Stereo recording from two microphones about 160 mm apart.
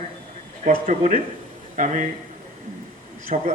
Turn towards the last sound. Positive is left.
turn(degrees=-50)  # may be behind; listen again after turning